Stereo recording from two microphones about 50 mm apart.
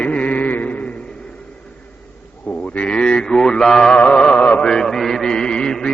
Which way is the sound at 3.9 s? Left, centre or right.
Left.